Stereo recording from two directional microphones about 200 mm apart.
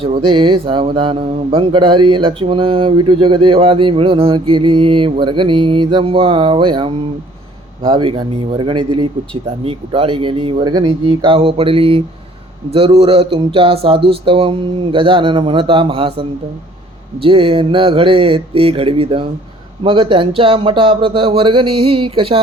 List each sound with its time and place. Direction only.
0.0 s speech: 25° right (ahead or behind)
17.2 s speech: 25° right (ahead or behind)